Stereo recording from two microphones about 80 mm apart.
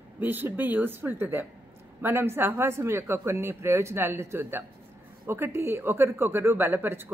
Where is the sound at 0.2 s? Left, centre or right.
Right.